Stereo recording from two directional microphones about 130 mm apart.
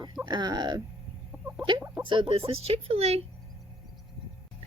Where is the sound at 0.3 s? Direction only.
35° right (ahead or behind).